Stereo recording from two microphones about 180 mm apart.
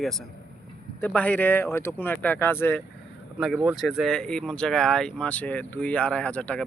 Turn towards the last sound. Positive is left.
turn(degrees=10)  # may be behind; listen again after turning